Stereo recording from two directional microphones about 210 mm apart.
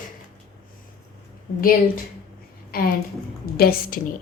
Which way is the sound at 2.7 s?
45° left (ahead or behind).